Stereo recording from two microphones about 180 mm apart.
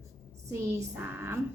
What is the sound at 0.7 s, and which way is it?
Speech, 15° right (ahead or behind).